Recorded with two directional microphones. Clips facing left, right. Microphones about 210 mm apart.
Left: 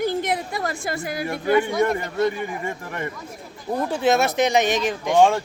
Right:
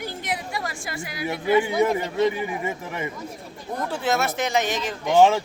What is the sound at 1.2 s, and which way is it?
A man's voice, 5° right (ahead or behind).